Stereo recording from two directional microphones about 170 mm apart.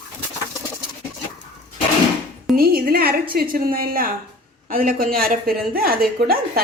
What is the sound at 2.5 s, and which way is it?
A woman's voice, 60° right (ahead or behind).